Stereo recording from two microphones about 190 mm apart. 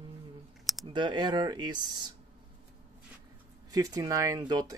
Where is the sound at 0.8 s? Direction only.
25° right (ahead or behind).